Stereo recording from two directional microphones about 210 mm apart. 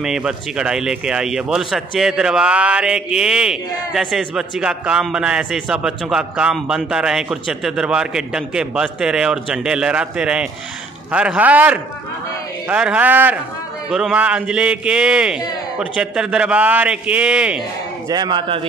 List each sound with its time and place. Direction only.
0.0 s speech: 5° right (ahead or behind)
18.1 s a man's voice: 20° right (ahead or behind)